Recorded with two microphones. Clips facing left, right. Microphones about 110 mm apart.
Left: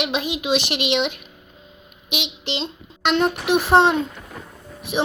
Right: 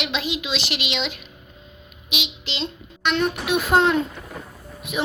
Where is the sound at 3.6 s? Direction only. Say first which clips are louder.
Left 3 dB; 30° left (ahead or behind).